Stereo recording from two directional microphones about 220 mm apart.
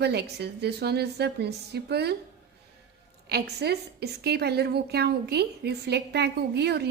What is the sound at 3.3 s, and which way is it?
A woman's voice, 50° right (ahead or behind).